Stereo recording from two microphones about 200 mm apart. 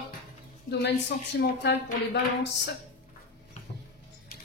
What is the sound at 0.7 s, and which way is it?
Speech, 60° left (ahead or behind).